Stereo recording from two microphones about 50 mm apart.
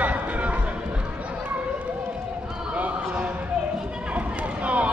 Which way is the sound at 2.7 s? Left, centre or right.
Right.